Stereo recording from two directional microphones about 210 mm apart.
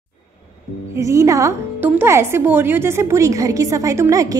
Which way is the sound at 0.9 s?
15° right (ahead or behind).